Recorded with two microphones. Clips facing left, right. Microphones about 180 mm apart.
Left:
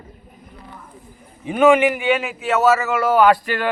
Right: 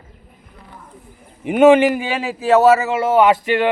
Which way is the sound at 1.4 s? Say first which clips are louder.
Right 3 dB; 20° right (ahead or behind).